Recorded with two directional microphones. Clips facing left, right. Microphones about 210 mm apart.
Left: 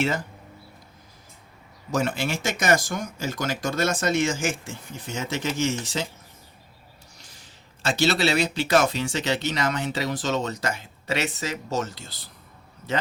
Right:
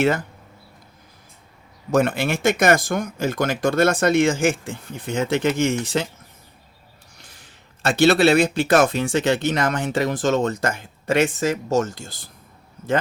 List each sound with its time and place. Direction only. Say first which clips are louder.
1.9 s speech: right 6 dB; 55° right (ahead or behind)
7.2 s speech: right 2 dB; 60° right (ahead or behind)